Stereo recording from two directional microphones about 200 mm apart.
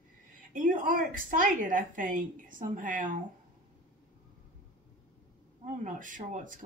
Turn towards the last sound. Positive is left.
turn(degrees=-40)  # may be behind; listen again after turning